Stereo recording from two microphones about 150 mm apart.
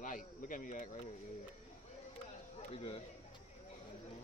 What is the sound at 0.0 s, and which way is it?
Speech, 60° left (ahead or behind).